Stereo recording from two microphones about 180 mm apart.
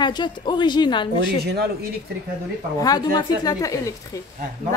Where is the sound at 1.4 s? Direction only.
65° right (ahead or behind).